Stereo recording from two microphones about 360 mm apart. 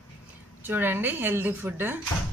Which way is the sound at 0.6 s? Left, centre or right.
Centre.